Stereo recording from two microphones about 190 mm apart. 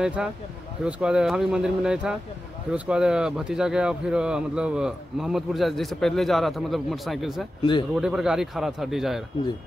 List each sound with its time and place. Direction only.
0.0 s speech: 5° right (ahead or behind)